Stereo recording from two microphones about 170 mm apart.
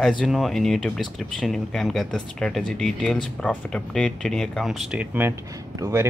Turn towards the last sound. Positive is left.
turn(degrees=-20)  # may be behind; listen again after turning